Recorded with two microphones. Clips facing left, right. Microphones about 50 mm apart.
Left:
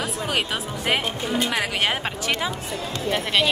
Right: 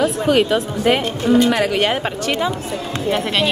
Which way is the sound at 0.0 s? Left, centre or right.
Centre.